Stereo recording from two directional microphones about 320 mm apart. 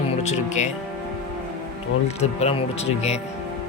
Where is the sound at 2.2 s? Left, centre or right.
Centre.